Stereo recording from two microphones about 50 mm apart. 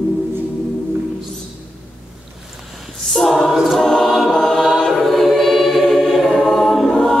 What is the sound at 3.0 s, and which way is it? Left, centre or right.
A capella, centre.